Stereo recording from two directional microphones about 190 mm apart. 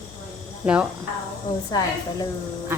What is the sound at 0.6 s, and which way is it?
Speech, 5° right (ahead or behind).